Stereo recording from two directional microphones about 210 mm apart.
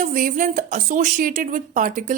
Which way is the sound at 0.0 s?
40° right (ahead or behind).